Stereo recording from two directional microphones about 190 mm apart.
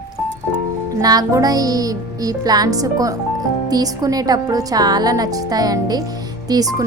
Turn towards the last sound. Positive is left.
turn(degrees=-20)  # may be behind; listen again after turning